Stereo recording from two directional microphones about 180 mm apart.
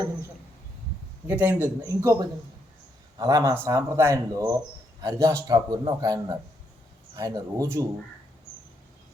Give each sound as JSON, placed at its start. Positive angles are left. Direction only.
{"t": 1.3, "sound": "a man's voice", "side_deg": -10}